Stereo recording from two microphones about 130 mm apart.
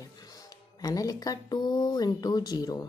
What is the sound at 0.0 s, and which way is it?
A woman's voice, 30° left (ahead or behind).